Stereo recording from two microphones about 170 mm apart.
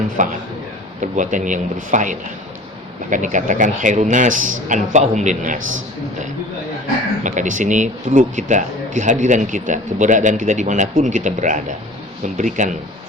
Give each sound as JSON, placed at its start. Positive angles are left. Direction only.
{"t": 0.2, "sound": "speech", "side_deg": -50}
{"t": 7.3, "sound": "speech", "side_deg": -50}